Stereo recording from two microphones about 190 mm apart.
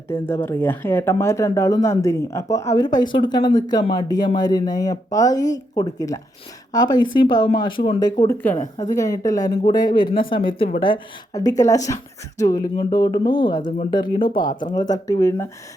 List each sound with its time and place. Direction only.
0.1 s speech: 15° left (ahead or behind)
13.6 s speech: 45° left (ahead or behind)
13.9 s speech: 25° left (ahead or behind)